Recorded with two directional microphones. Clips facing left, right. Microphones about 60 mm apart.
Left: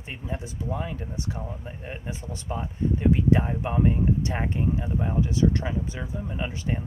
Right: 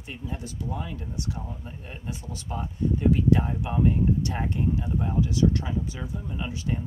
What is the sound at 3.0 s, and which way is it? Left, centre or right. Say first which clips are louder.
Speech: even; left.